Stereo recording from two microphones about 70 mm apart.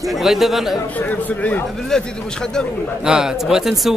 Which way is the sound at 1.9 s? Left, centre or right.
Centre.